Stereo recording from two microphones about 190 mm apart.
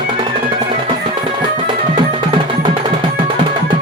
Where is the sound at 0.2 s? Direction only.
25° right (ahead or behind).